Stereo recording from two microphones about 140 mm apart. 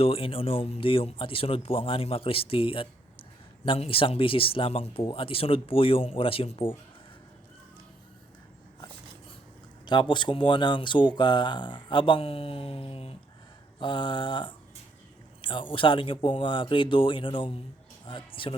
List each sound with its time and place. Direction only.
0.0 s speech: 40° left (ahead or behind)
9.8 s speech: 35° left (ahead or behind)
15.4 s a sound: 35° left (ahead or behind)
15.7 s speech: 35° left (ahead or behind)